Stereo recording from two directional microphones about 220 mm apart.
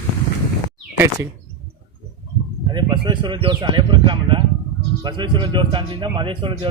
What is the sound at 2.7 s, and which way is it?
Speech, 20° right (ahead or behind).